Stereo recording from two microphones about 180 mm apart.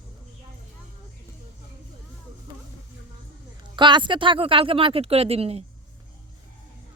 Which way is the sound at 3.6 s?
25° right (ahead or behind).